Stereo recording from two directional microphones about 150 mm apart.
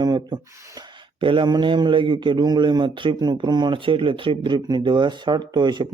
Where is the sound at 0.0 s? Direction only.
25° right (ahead or behind).